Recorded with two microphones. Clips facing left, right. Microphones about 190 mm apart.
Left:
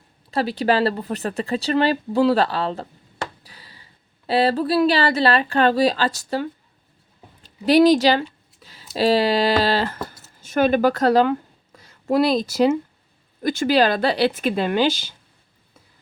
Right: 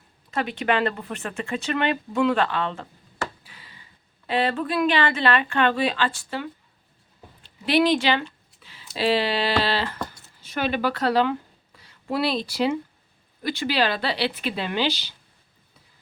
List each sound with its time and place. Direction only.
0.3 s speech: 35° left (ahead or behind)
3.4 s a sound: 40° left (ahead or behind)
4.3 s speech: 35° left (ahead or behind)